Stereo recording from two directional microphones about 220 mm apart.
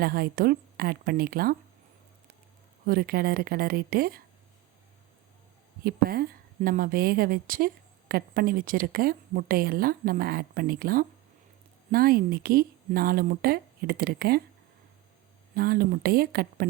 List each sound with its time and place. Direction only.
0.0 s speech: 45° right (ahead or behind)
2.8 s speech: 40° right (ahead or behind)
5.8 s a woman's voice: 45° right (ahead or behind)
15.5 s speech: 45° right (ahead or behind)